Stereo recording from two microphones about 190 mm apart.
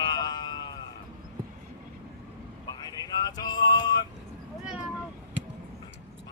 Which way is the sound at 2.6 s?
20° left (ahead or behind).